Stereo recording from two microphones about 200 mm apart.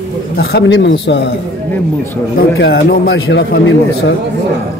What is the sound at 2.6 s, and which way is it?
Speech, 65° left (ahead or behind).